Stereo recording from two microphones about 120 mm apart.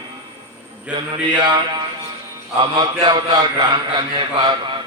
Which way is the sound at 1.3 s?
40° right (ahead or behind).